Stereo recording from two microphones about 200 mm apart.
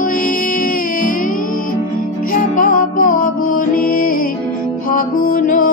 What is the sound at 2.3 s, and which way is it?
Music, 45° left (ahead or behind).